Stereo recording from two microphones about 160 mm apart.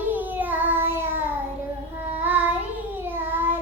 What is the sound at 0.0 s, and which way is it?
Child singing, 10° right (ahead or behind).